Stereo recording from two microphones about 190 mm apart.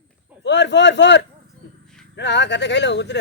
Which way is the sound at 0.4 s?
65° left (ahead or behind).